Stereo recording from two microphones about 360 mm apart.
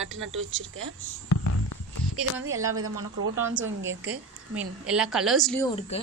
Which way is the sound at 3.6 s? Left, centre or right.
Right.